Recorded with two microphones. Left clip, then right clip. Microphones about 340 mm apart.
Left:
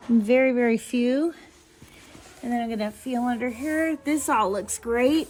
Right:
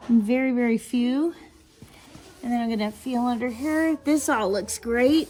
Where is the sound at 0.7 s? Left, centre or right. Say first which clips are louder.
Left 2 dB; centre.